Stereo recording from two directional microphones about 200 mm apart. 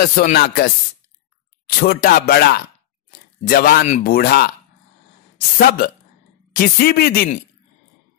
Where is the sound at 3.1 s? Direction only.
50° left (ahead or behind).